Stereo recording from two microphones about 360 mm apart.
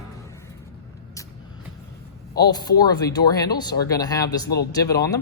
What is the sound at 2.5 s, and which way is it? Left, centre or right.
Speech, centre.